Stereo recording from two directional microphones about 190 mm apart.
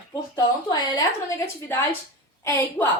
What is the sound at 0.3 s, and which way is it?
A woman's voice, 20° left (ahead or behind).